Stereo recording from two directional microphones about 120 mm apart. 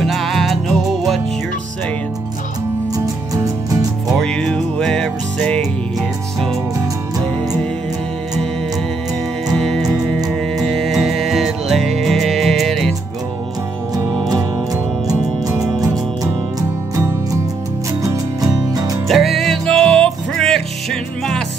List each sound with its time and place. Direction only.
0.0 s music: centre (ahead or behind)
4.1 s music: 5° left (ahead or behind)
9.5 s music: centre (ahead or behind)
15.0 s music: 25° right (ahead or behind)
19.0 s music: centre (ahead or behind)